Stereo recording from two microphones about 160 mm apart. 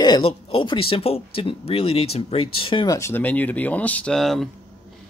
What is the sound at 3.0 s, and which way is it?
Speech, 15° left (ahead or behind).